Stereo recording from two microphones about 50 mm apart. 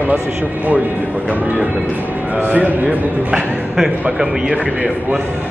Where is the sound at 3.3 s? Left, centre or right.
Centre.